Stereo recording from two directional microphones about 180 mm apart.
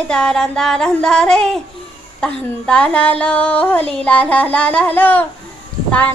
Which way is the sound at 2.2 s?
5° left (ahead or behind).